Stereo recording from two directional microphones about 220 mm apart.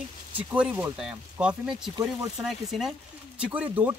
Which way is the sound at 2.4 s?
Centre (ahead or behind).